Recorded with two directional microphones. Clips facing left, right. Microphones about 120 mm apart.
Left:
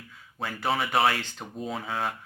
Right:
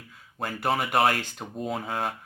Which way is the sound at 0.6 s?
Centre (ahead or behind).